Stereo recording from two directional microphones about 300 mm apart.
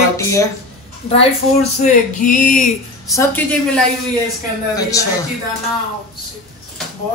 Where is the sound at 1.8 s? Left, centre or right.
Left.